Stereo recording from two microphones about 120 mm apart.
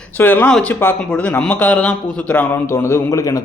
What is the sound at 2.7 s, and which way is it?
Speech, 20° left (ahead or behind).